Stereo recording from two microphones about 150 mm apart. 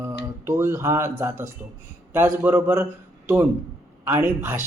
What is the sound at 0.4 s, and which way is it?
A man's voice, 15° right (ahead or behind).